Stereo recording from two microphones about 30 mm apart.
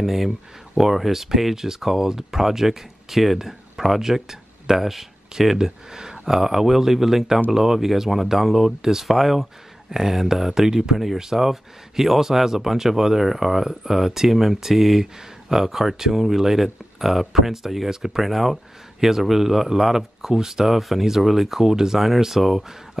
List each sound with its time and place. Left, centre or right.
0.0 s speech: centre
3.3 s a sound: centre
4.3 s speech: centre